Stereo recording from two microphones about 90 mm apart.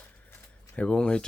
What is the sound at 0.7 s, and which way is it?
Speech, 10° left (ahead or behind).